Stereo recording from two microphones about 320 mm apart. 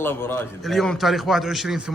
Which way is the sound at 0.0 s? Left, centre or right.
Centre.